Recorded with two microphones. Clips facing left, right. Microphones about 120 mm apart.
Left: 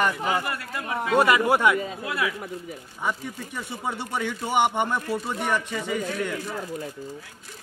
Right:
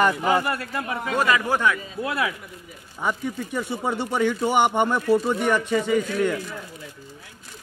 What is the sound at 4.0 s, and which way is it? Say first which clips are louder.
Speech: right 7 dB; 60° right (ahead or behind).